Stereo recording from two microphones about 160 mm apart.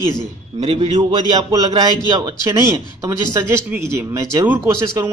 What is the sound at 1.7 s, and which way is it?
Speech, 25° right (ahead or behind).